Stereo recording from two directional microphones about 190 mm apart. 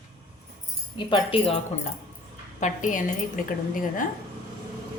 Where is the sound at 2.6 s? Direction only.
45° left (ahead or behind).